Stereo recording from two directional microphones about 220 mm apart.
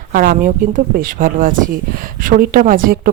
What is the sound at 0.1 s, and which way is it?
Speech, 40° right (ahead or behind).